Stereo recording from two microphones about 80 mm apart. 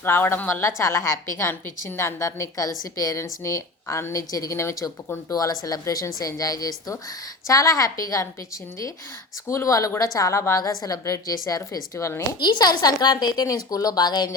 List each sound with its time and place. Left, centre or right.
0.0 s a woman's voice: left
3.4 s a woman's voice: left
5.3 s a woman's voice: left
9.5 s a woman's voice: left
10.6 s a woman's voice: left
12.4 s a woman's voice: left